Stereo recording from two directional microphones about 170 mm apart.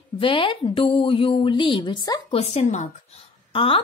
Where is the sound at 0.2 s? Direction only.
30° left (ahead or behind).